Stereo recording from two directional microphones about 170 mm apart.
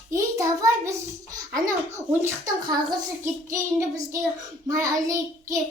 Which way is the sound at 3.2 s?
20° right (ahead or behind).